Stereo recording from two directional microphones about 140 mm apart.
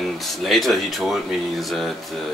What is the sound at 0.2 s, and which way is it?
Speech, centre (ahead or behind).